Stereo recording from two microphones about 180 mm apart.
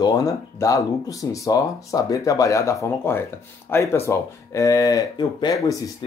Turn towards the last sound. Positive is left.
turn(degrees=25)  # may be behind; listen again after turning